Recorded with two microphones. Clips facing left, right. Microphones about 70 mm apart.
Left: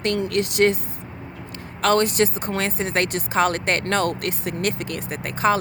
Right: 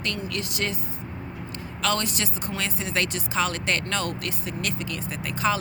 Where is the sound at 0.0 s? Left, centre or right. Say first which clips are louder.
Left 9 dB; left.